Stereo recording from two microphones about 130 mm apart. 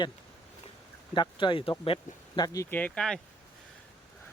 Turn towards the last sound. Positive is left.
turn(degrees=5)  # may be behind; listen again after turning